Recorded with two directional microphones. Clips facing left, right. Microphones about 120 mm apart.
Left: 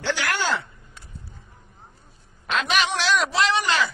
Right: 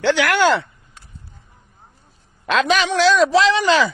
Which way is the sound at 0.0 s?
75° right (ahead or behind).